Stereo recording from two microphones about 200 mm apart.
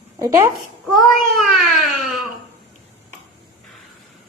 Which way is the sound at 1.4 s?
Centre (ahead or behind).